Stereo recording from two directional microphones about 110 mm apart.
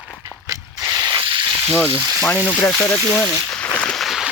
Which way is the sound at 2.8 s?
10° left (ahead or behind).